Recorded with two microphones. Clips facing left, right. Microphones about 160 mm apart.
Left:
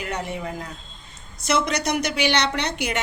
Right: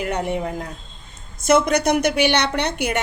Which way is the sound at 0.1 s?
55° right (ahead or behind).